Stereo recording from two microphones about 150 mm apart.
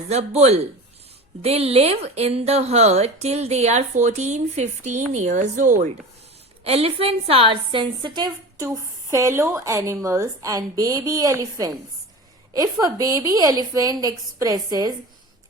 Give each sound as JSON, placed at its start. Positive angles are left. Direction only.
{"t": 0.1, "sound": "speech", "side_deg": -45}
{"t": 6.7, "sound": "a woman's voice", "side_deg": -40}
{"t": 12.8, "sound": "a woman's voice", "side_deg": -25}